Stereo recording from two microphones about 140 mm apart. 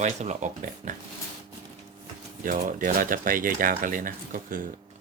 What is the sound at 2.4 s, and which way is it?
Speech, 85° right.